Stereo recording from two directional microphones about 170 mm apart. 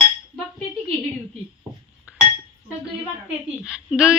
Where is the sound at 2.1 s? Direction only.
5° right (ahead or behind).